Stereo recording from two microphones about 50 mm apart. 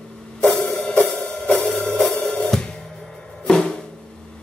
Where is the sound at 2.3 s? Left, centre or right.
Centre.